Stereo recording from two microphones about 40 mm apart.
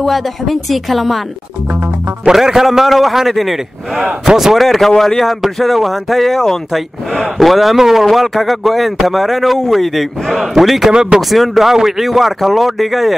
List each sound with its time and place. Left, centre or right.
0.0 s speech: centre
2.3 s speech: centre
4.3 s speech: centre
4.6 s speech: centre
10.9 s speech: right
11.1 s speech: centre